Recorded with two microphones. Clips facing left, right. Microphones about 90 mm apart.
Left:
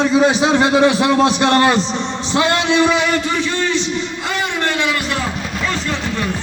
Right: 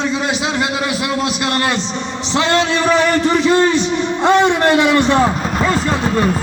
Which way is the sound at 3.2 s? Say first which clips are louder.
Right 6 dB; 35° right (ahead or behind).